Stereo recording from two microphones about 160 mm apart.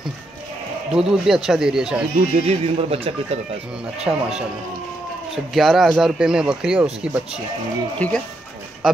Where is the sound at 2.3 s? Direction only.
40° right (ahead or behind).